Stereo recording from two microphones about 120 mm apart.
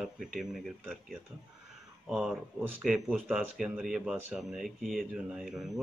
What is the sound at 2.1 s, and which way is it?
Speech, 5° right (ahead or behind).